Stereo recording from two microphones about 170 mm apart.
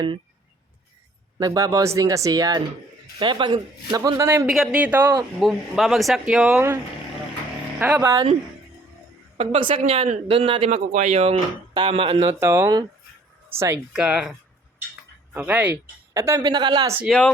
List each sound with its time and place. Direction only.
1.4 s speech: 20° right (ahead or behind)
4.4 s speech: 5° right (ahead or behind)
7.8 s speech: 10° right (ahead or behind)
9.4 s speech: 30° right (ahead or behind)
11.7 s speech: 30° right (ahead or behind)
12.3 s speech: 15° right (ahead or behind)
17.1 s speech: 5° left (ahead or behind)